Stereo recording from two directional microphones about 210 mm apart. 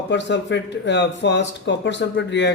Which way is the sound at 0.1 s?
55° left (ahead or behind).